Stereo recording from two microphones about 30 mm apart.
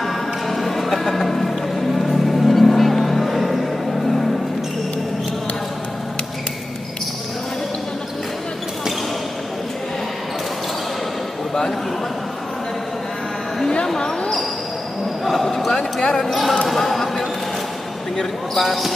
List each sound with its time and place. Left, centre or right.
0.0 s music: centre
2.0 s vehicle: centre
13.8 s basketball bounce: centre
15.2 s basketball bounce: centre
15.7 s a sound: left
16.2 s basketball bounce: centre